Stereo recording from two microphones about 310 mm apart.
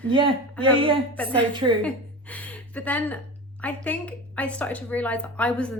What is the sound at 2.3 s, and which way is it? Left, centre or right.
A woman's voice, centre.